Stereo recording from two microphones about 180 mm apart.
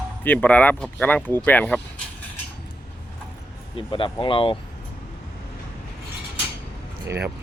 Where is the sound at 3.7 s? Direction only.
30° left (ahead or behind).